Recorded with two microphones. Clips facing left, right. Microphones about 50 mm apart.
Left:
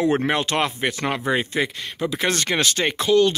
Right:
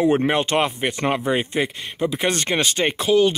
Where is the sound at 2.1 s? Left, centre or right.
Right.